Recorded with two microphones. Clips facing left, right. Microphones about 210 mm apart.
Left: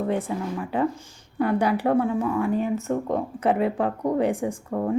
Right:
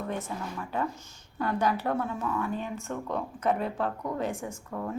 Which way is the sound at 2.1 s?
30° left (ahead or behind).